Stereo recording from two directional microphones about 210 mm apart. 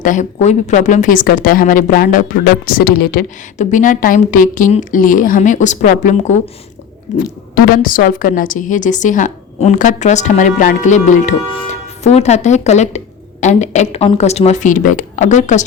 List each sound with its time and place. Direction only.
0.0 s a woman's voice: 35° left (ahead or behind)